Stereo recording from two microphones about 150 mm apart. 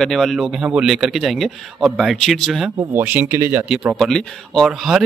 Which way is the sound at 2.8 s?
15° right (ahead or behind).